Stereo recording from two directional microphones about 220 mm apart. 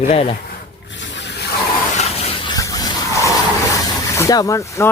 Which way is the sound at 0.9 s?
55° left (ahead or behind).